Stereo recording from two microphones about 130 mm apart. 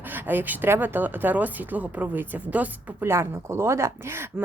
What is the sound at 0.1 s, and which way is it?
Speech, 15° right (ahead or behind).